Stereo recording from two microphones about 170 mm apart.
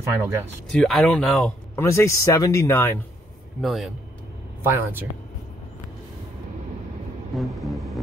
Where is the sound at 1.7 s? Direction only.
15° left (ahead or behind).